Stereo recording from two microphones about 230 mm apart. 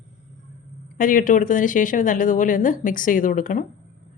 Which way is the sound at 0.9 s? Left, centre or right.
Left.